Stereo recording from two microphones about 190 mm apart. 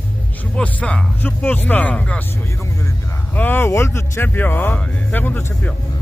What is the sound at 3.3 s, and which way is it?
Speech, 10° left (ahead or behind).